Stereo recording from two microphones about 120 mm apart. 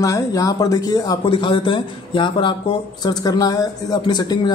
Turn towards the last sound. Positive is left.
turn(degrees=35)  # may be behind; listen again after turning